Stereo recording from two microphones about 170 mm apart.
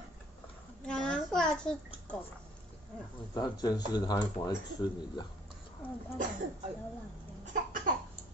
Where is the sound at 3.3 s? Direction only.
20° left (ahead or behind).